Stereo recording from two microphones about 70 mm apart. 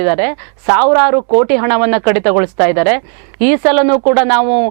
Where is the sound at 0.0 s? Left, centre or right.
Centre.